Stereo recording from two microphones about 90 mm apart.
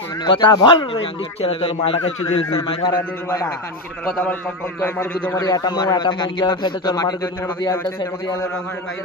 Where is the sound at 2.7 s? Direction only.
75° left (ahead or behind).